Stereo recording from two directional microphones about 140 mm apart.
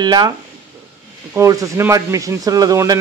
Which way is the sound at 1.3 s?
25° right (ahead or behind).